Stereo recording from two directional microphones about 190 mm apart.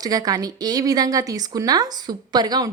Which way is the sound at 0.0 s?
20° right (ahead or behind).